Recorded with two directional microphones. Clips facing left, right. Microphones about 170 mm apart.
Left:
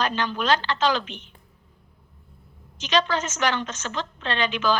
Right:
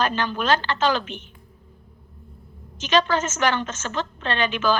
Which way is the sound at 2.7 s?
50° right (ahead or behind).